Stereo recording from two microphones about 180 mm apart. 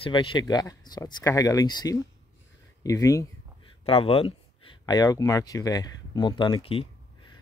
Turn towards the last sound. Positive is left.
turn(degrees=30)  # may be behind; listen again after turning